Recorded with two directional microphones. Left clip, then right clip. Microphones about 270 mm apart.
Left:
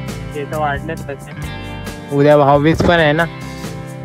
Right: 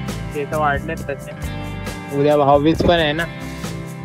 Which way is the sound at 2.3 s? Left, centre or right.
Left.